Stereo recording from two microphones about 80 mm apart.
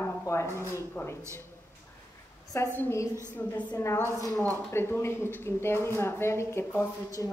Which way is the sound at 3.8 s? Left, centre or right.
Left.